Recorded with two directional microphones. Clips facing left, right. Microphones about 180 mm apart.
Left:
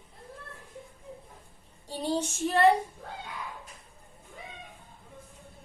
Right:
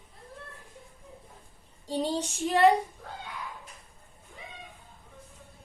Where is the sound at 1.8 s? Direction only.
15° right (ahead or behind).